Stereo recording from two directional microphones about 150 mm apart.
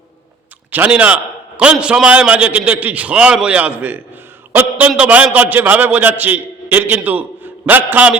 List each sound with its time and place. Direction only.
0.7 s a man's voice: 10° right (ahead or behind)